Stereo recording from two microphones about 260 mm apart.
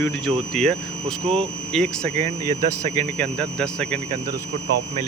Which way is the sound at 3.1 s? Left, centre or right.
Centre.